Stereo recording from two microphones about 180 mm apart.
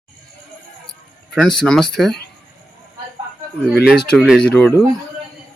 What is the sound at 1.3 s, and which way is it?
Speech, centre (ahead or behind).